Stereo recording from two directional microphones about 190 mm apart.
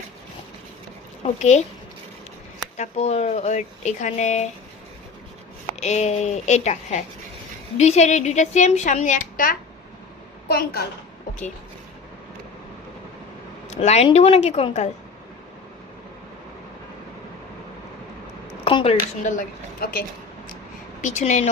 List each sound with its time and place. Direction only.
1.2 s a woman's voice: 35° left (ahead or behind)
2.7 s a woman's voice: 35° left (ahead or behind)
5.8 s a woman's voice: 35° left (ahead or behind); by 10.8 s 55° left (ahead or behind)
13.7 s a woman's voice: 35° left (ahead or behind)
18.6 s speech: 30° left (ahead or behind)
19.2 s a woman's voice: 45° left (ahead or behind)
21.0 s a woman's voice: 40° left (ahead or behind)